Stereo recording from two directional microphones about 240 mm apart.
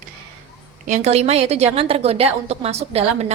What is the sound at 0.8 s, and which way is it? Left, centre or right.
A woman's voice, right.